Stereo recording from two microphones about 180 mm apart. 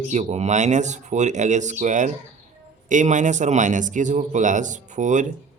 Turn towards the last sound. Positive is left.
turn(degrees=-40)  # may be behind; listen again after turning